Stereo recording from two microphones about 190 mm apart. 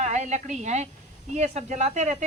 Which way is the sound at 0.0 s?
40° right (ahead or behind).